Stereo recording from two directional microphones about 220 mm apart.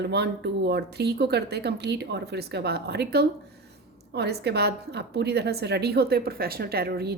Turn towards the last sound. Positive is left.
turn(degrees=-45)  # may be behind; listen again after turning